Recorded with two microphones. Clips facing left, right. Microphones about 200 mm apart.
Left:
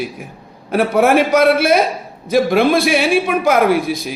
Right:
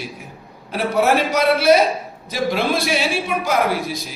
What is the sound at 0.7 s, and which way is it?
A man's voice, 55° left (ahead or behind).